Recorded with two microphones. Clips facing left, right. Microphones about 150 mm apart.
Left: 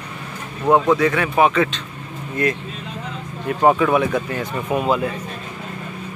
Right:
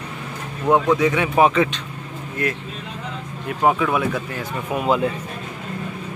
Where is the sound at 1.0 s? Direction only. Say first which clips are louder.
Even; 15° right (ahead or behind).